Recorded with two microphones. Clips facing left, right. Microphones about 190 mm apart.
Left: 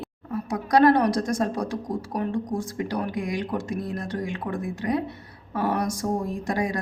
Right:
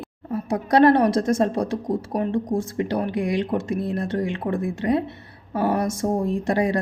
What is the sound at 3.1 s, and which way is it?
Speech, 65° right (ahead or behind).